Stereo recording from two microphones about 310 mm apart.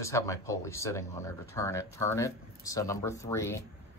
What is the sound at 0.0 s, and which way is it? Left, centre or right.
Speech, centre.